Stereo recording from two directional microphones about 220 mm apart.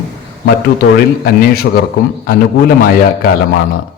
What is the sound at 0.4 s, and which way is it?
A man's voice, 45° left (ahead or behind).